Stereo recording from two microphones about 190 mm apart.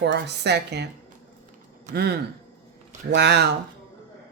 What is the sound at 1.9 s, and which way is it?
Speech, 60° right (ahead or behind).